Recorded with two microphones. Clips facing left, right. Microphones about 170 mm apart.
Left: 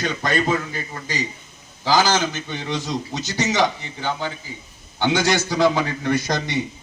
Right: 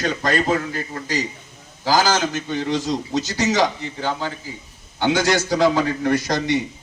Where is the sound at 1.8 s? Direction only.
40° right (ahead or behind).